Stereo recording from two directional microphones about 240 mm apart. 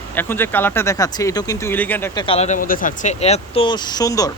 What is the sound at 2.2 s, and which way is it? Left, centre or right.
Speech, left.